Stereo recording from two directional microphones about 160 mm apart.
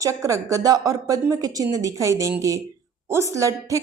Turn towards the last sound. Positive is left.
turn(degrees=-20)  # may be behind; listen again after turning